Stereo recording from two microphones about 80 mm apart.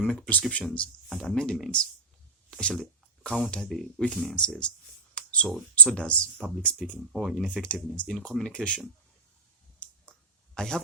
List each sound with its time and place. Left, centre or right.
0.0 s speech: centre
5.1 s a sound: centre
5.7 s speech: centre
7.1 s speech: centre
7.6 s speech: centre
9.8 s a sound: centre